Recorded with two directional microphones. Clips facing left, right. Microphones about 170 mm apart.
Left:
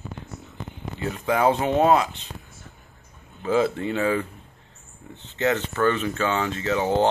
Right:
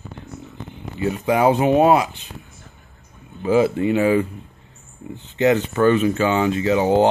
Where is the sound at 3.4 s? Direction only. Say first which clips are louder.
Right 5 dB; 10° right (ahead or behind).